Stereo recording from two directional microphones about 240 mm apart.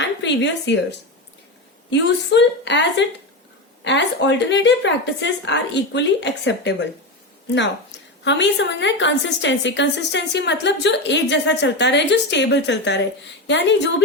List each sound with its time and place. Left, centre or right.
0.0 s a woman's voice: left
3.8 s a woman's voice: left